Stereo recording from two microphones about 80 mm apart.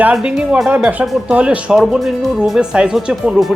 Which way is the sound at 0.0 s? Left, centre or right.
Centre.